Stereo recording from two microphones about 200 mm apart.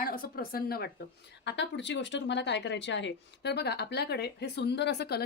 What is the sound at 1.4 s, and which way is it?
A woman's voice, 60° left (ahead or behind).